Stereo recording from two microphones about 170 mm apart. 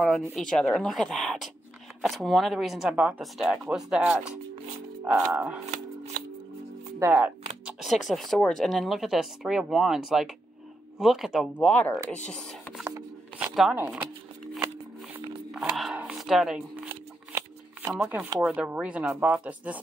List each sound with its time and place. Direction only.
0.3 s speech: 5° left (ahead or behind)
7.0 s speech: 10° right (ahead or behind)
11.5 s speech: 10° left (ahead or behind)
12.3 s a sound: 5° left (ahead or behind)
13.4 s speech: 5° right (ahead or behind)
15.5 s a sound: centre (ahead or behind)
16.9 s shuffling cards: 15° right (ahead or behind)
18.0 s speech: 15° right (ahead or behind)